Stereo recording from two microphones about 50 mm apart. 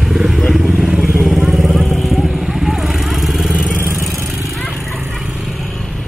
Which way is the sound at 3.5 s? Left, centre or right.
Right.